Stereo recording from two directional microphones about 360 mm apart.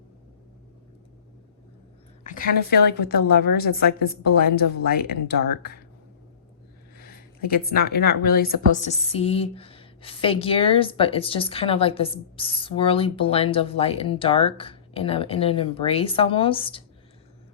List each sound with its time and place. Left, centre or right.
2.2 s a woman's voice: left
6.9 s a woman's voice: left